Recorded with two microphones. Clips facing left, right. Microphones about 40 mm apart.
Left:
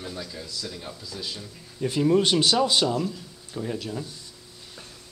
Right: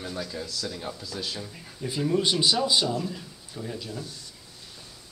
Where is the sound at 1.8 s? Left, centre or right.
Left.